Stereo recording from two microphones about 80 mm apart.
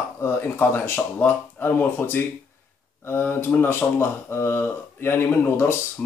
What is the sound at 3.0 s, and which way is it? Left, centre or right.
A man's voice, left.